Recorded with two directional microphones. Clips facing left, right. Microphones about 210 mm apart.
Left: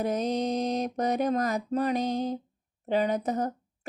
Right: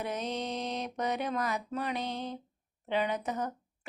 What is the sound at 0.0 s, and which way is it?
Mantra, 40° left (ahead or behind).